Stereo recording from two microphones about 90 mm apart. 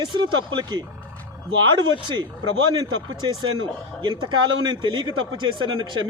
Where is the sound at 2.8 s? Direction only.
50° right (ahead or behind).